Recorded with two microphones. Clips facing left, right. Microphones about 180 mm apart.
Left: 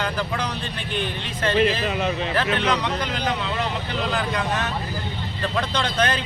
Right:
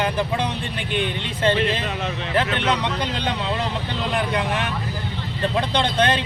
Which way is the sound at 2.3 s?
20° right (ahead or behind).